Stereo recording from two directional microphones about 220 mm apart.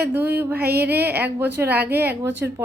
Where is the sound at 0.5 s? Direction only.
45° right (ahead or behind).